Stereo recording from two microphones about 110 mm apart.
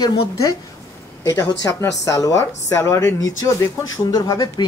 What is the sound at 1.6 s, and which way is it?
Speech, 25° left (ahead or behind).